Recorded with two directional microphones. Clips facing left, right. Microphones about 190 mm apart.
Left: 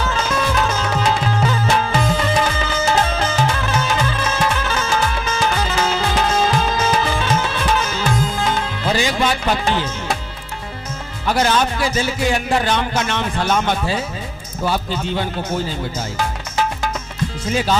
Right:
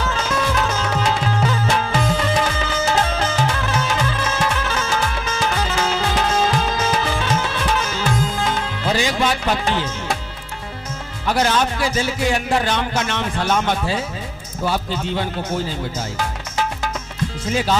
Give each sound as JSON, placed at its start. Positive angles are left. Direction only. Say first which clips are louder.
{"t": 0.1, "sound": "music", "louder": "left 1 dB", "side_deg": 20}
{"t": 11.3, "sound": "a man's voice", "louder": "left 1 dB", "side_deg": 15}